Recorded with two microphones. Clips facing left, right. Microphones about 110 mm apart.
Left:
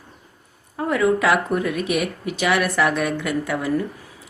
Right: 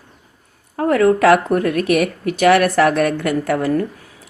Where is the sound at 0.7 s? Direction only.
55° right (ahead or behind).